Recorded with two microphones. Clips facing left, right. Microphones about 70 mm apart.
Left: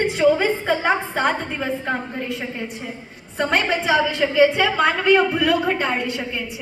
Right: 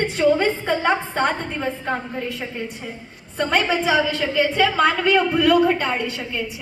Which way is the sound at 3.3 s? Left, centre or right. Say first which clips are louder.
Even; centre.